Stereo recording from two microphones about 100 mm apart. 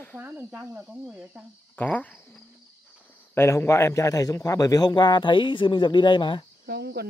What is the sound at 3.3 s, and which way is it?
A man's voice, 25° left (ahead or behind).